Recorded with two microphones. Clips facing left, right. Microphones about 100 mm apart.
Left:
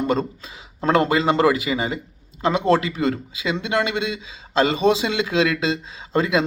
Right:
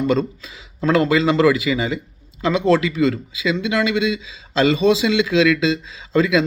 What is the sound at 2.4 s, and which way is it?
Speech, 50° left (ahead or behind).